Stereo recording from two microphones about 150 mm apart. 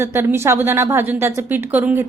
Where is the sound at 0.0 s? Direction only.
15° right (ahead or behind).